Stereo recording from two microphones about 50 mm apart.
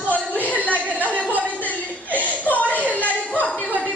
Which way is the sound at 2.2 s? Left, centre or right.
Left.